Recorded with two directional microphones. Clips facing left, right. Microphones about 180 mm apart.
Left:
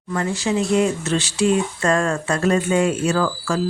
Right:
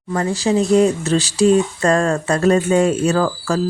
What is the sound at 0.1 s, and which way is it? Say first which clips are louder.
Speech: right 4 dB; 35° right (ahead or behind).